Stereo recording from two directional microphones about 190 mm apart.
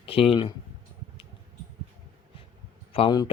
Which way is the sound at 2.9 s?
25° left (ahead or behind).